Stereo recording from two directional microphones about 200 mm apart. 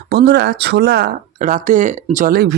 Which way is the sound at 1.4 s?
40° right (ahead or behind).